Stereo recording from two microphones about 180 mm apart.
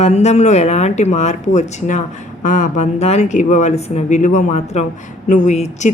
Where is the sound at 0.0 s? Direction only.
40° left (ahead or behind).